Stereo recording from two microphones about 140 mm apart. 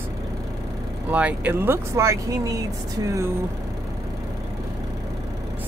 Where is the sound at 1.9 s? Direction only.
20° right (ahead or behind).